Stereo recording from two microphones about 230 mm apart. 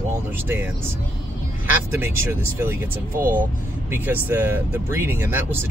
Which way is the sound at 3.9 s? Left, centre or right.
Centre.